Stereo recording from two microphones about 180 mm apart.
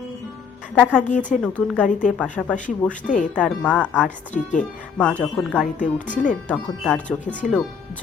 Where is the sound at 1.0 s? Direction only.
45° left (ahead or behind).